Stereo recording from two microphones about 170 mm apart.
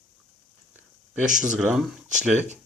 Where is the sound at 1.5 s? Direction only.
5° right (ahead or behind).